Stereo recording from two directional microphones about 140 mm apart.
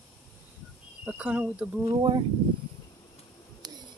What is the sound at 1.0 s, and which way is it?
Speech, 10° right (ahead or behind).